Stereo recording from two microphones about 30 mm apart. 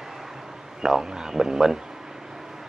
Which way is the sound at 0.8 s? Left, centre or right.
Right.